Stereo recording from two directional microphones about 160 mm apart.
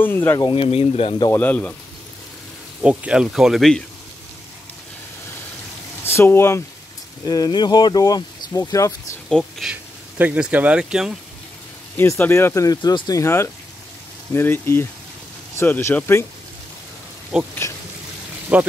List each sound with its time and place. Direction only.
0.0 s speech: 15° left (ahead or behind)
0.5 s speech: 35° left (ahead or behind)
1.3 s speech: 10° left (ahead or behind)
2.8 s speech: 5° right (ahead or behind)
6.0 s speech: 15° left (ahead or behind)
9.3 s speech: centre (ahead or behind)
12.0 s speech: 15° left (ahead or behind)
17.3 s speech: 5° right (ahead or behind)
18.5 s speech: 10° right (ahead or behind)